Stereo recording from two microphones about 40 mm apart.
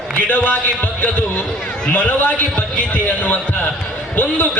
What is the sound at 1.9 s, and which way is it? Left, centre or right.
Speech, left.